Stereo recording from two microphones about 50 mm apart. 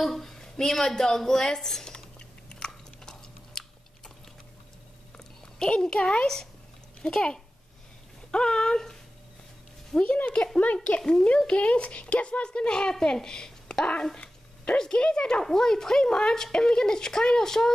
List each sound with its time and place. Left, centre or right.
0.0 s a sound: centre
5.1 s a sound: centre
7.0 s a child's voice: centre
10.0 s speech: left
10.3 s speech: centre
10.6 s speech: left
11.0 s a woman's voice: centre